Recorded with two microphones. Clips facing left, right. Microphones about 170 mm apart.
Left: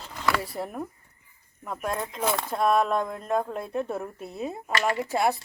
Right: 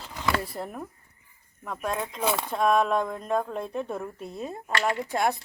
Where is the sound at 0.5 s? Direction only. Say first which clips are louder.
Left 2 dB; 5° left (ahead or behind).